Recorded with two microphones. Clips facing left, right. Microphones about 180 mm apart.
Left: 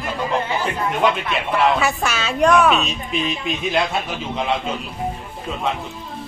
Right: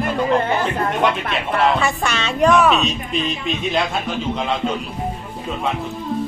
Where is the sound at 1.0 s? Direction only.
Centre (ahead or behind).